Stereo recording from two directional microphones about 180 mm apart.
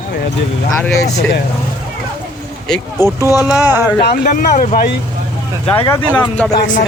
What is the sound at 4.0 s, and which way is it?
Speech, 50° left (ahead or behind).